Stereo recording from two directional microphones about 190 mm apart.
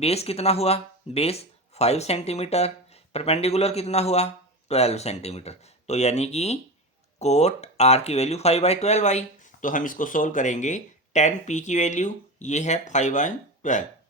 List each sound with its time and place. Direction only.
0.0 s speech: 35° left (ahead or behind)